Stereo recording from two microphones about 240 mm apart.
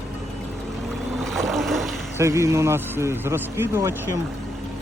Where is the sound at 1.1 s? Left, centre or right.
Centre.